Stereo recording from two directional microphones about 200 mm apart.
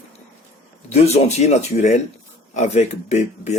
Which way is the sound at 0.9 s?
30° left (ahead or behind).